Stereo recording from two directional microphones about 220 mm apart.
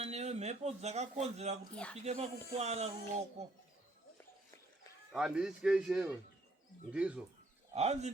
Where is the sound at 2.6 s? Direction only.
30° right (ahead or behind).